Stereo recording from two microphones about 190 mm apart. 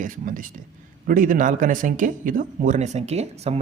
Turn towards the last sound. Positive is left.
turn(degrees=-35)  # may be behind; listen again after turning